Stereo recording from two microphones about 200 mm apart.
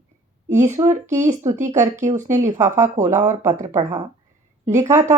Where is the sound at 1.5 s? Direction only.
35° right (ahead or behind).